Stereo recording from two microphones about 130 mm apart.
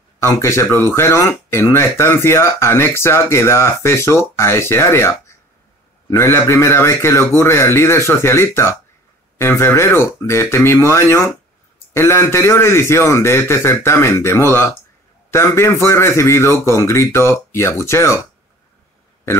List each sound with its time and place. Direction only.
0.2 s speech: 20° left (ahead or behind)